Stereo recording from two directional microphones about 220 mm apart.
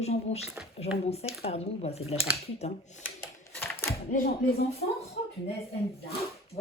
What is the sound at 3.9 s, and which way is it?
Speech, 35° left (ahead or behind).